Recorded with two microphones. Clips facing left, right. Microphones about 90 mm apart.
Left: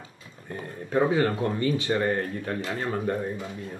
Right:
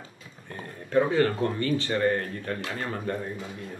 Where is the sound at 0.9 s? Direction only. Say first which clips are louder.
Even; 15° left (ahead or behind).